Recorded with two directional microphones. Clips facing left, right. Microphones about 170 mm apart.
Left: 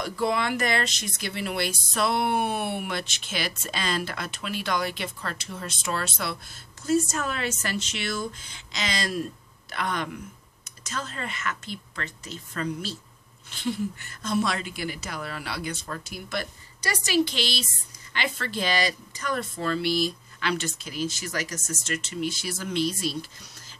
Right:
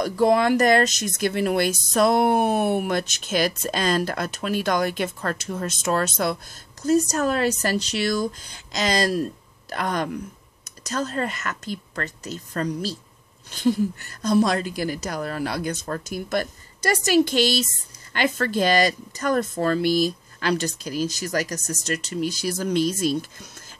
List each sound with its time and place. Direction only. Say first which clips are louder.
0.0 s speech: right 8 dB; 45° right (ahead or behind)